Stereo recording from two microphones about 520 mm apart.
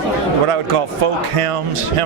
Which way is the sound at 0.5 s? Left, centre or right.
Right.